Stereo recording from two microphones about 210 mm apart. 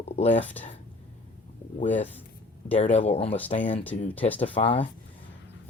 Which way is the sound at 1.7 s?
35° left (ahead or behind).